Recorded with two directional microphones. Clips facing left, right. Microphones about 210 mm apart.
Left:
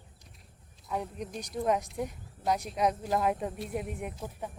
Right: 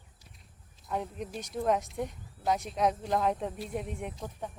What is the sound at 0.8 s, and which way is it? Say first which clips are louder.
Speech: even; centre (ahead or behind).